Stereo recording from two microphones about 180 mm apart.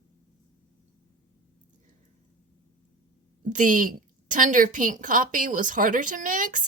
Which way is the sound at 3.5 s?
45° right (ahead or behind).